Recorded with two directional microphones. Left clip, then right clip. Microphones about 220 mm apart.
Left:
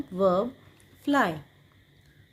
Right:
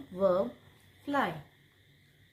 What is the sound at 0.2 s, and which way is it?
A woman's voice, 40° left (ahead or behind).